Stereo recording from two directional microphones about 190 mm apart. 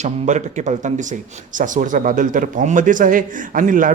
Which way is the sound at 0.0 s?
40° right (ahead or behind).